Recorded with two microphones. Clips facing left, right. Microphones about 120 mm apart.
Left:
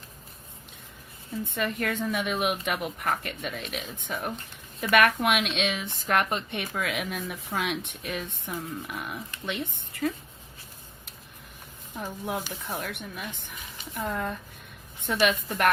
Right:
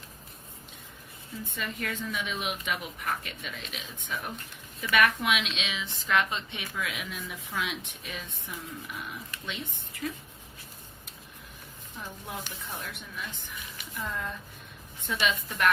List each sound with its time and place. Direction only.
1.5 s a woman's voice: 55° left (ahead or behind)
11.9 s a woman's voice: 60° left (ahead or behind)